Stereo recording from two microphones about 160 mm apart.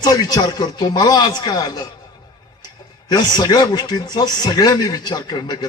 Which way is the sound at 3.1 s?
25° left (ahead or behind).